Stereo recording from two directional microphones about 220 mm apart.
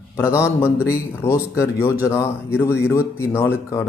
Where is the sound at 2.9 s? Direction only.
10° left (ahead or behind).